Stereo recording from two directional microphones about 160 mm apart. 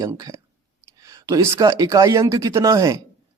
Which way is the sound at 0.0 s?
20° right (ahead or behind).